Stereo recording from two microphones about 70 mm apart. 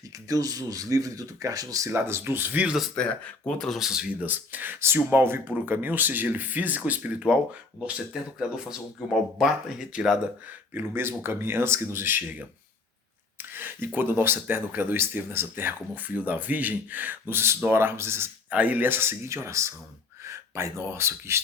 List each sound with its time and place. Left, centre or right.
0.3 s speech: right
1.9 s speech: right
2.9 s speech: centre
3.8 s speech: centre
4.2 s speech: right
10.8 s speech: right
13.5 s speech: right
18.5 s speech: right